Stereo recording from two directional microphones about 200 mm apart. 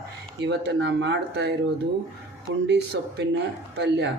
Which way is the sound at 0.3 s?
60° right (ahead or behind).